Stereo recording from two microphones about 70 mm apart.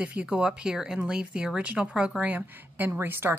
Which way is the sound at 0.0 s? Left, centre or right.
Centre.